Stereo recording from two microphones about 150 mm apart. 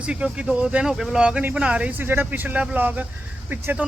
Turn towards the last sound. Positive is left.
turn(degrees=-10)  # may be behind; listen again after turning